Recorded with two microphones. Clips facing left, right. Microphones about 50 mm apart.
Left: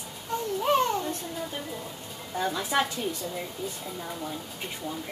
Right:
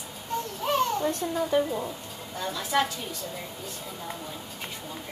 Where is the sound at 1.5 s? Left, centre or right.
Right.